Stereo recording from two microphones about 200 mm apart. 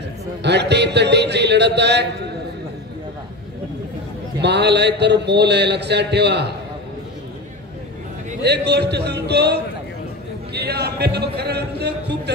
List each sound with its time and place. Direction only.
0.4 s a man's voice: 60° right (ahead or behind)
4.4 s a man's voice: 60° right (ahead or behind)
8.5 s a man's voice: 55° right (ahead or behind)